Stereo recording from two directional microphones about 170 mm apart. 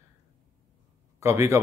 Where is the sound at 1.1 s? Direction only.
15° right (ahead or behind).